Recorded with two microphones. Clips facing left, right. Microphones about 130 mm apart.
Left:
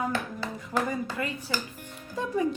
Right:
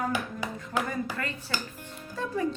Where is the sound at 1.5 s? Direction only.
10° left (ahead or behind).